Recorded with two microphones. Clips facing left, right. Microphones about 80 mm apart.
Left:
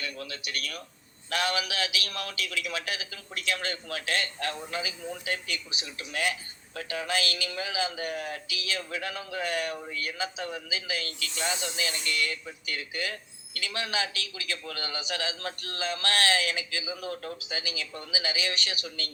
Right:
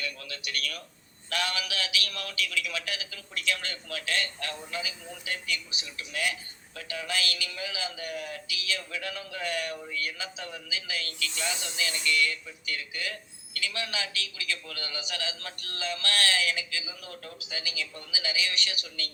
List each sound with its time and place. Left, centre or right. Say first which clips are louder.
0.0 s a man's voice: left 1 dB; left